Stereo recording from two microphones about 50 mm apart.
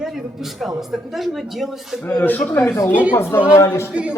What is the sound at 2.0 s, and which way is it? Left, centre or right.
Speech, left.